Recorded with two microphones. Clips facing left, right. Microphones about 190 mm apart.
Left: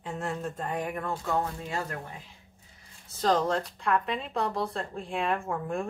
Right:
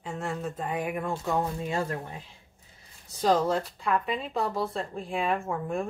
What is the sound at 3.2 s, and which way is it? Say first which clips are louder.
Speech: right 2 dB; 5° right (ahead or behind).